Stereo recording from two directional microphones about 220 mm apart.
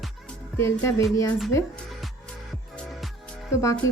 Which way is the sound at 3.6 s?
15° left (ahead or behind).